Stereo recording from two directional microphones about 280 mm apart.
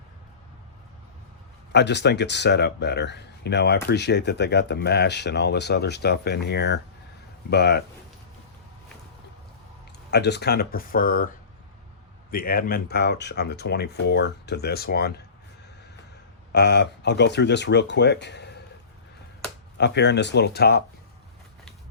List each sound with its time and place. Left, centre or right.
1.7 s speech: left
10.1 s speech: left
12.3 s speech: left
16.5 s speech: left
19.8 s speech: left